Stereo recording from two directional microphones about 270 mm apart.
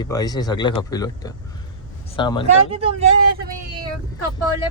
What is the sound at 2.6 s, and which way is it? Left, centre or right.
Speech, right.